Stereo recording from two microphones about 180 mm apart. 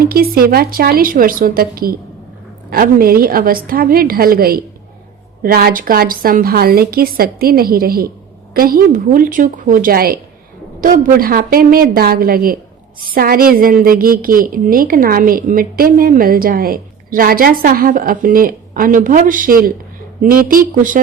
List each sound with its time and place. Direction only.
0.0 s a woman's voice: 55° right (ahead or behind)